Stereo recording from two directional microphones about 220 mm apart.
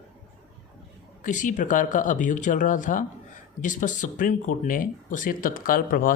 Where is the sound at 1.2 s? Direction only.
35° left (ahead or behind).